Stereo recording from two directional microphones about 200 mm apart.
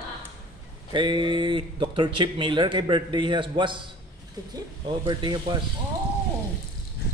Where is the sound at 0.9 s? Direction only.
25° right (ahead or behind).